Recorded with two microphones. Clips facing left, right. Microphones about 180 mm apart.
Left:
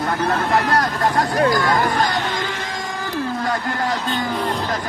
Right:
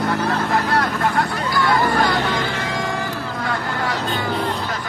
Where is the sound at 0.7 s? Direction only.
40° left (ahead or behind).